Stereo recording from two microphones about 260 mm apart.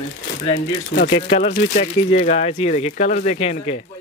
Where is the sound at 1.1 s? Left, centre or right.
Left.